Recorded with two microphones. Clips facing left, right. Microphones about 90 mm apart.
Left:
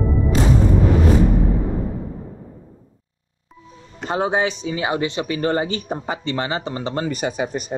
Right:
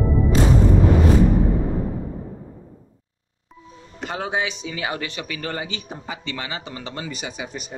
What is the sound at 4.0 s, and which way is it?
Speech, 30° left (ahead or behind).